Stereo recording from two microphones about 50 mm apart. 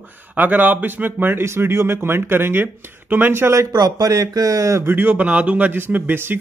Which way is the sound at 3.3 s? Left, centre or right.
Right.